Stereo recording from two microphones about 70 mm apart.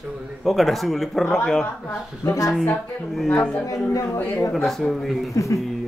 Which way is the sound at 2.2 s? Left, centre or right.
Left.